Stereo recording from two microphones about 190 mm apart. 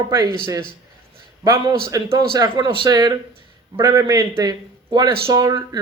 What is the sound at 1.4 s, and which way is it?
A man's voice, 20° right (ahead or behind).